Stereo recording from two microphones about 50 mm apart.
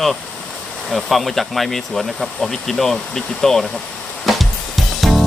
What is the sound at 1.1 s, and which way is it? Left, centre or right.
Speech, centre.